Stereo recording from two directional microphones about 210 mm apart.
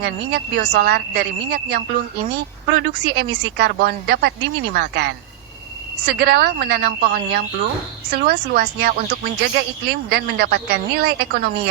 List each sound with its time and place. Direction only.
0.0 s speech: 50° right (ahead or behind)
6.1 s speech: 50° right (ahead or behind)